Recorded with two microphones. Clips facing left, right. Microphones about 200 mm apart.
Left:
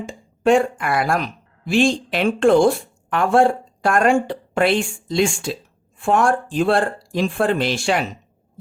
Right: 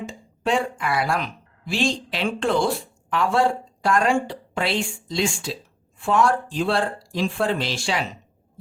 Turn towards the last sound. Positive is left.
turn(degrees=55)  # may be behind; listen again after turning